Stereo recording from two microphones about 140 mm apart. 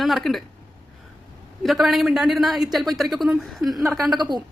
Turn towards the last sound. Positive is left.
turn(degrees=-30)  # may be behind; listen again after turning